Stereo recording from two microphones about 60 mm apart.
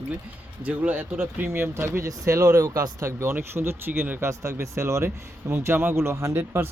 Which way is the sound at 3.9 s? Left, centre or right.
Right.